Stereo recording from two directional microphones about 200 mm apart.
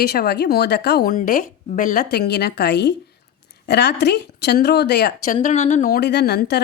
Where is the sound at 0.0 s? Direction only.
55° left (ahead or behind).